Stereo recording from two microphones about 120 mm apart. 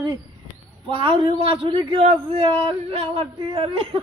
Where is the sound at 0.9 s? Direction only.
50° right (ahead or behind).